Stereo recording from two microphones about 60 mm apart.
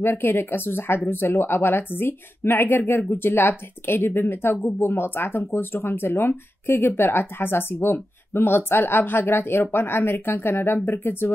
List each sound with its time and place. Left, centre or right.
0.0 s speech: left